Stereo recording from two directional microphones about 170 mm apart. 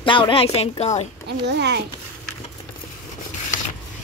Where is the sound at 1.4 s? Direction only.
90° right.